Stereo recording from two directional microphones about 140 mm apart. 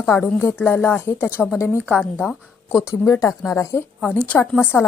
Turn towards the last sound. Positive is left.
turn(degrees=15)  # may be behind; listen again after turning